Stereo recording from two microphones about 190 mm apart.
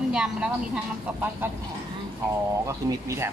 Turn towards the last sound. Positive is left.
turn(degrees=-15)  # may be behind; listen again after turning